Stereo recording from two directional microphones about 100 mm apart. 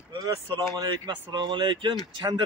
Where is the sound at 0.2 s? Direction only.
35° right (ahead or behind).